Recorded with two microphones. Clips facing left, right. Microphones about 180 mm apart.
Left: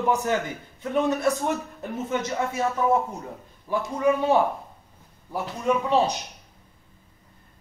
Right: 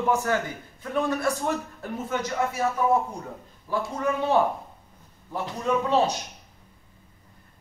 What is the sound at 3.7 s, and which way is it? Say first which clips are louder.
Speech: left 4 dB; 15° left (ahead or behind).